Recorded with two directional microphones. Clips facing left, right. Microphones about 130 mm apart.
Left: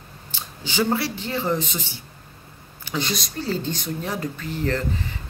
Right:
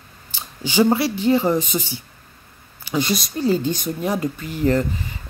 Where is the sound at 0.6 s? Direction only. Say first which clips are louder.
Right 6 dB; 15° right (ahead or behind).